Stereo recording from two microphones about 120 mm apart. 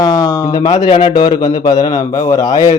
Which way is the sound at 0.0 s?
35° left (ahead or behind).